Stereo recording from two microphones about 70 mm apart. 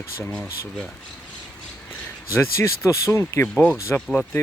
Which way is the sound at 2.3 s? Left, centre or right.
Left.